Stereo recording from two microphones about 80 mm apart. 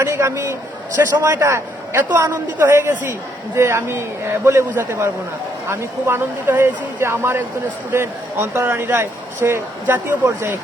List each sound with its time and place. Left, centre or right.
0.0 s a man's voice: right